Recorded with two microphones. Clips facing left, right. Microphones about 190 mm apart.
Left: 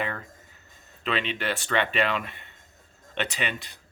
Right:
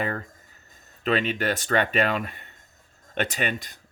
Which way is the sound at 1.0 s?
45° right (ahead or behind).